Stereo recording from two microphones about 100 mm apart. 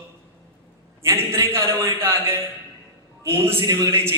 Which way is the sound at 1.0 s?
25° right (ahead or behind).